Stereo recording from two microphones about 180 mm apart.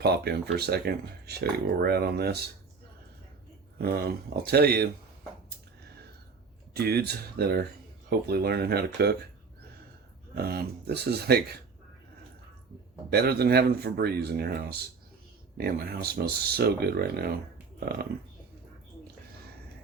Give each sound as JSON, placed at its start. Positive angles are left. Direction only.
{"t": 0.0, "sound": "speech", "side_deg": -60}
{"t": 4.5, "sound": "speech", "side_deg": -60}
{"t": 6.7, "sound": "speech", "side_deg": -60}
{"t": 10.3, "sound": "speech", "side_deg": -60}
{"t": 13.1, "sound": "speech", "side_deg": -60}